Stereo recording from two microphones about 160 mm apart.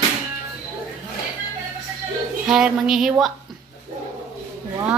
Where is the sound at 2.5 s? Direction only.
5° right (ahead or behind).